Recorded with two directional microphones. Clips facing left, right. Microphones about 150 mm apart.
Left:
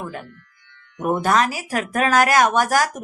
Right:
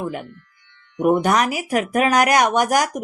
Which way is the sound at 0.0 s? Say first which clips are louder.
Right 4 dB; 20° right (ahead or behind).